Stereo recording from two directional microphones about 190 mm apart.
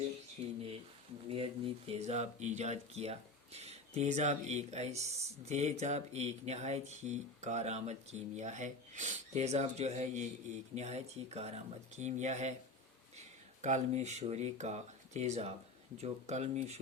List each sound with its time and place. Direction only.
0.4 s speech: 35° right (ahead or behind)